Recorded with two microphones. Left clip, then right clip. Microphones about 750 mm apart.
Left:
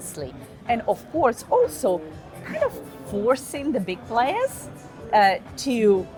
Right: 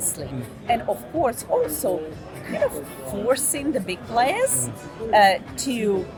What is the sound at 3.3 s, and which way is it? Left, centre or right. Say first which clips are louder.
A woman's voice: even; left.